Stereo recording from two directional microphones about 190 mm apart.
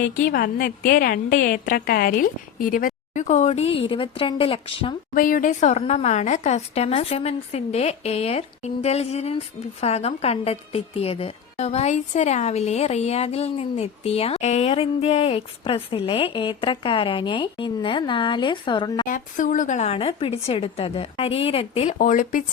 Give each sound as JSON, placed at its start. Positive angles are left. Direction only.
{"t": 0.0, "sound": "a woman's voice", "side_deg": 50}
{"t": 5.1, "sound": "a woman's voice", "side_deg": 45}
{"t": 19.0, "sound": "a woman's voice", "side_deg": 45}
{"t": 21.9, "sound": "a woman's voice", "side_deg": 45}